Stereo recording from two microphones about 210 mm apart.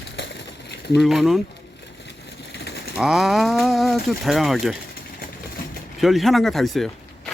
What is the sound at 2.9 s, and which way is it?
Speech, centre (ahead or behind).